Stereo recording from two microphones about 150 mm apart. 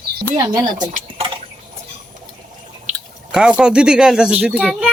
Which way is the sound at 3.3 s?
5° right (ahead or behind).